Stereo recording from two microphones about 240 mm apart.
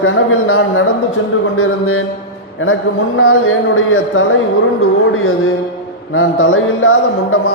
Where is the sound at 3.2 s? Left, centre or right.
Left.